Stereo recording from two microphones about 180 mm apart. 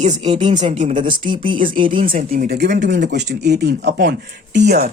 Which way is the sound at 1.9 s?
30° right (ahead or behind).